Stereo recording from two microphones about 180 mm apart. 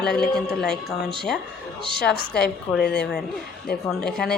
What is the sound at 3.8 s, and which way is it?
Speech, 5° left (ahead or behind).